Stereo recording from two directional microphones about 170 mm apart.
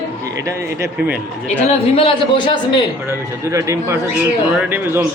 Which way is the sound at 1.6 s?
35° left (ahead or behind).